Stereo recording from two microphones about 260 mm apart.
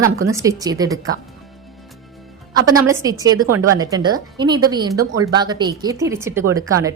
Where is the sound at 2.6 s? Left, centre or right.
Centre.